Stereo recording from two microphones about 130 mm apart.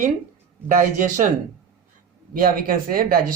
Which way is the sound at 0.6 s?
80° right.